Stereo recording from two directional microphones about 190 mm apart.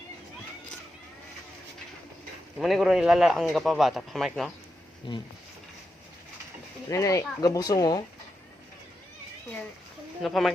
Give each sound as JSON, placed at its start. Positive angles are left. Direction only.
{"t": 2.6, "sound": "a man's voice", "side_deg": 0}
{"t": 5.1, "sound": "speech", "side_deg": 25}
{"t": 6.9, "sound": "speech", "side_deg": 15}
{"t": 10.2, "sound": "a man's voice", "side_deg": 0}